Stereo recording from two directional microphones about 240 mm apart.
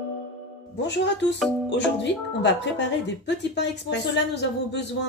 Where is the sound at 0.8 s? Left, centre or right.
Left.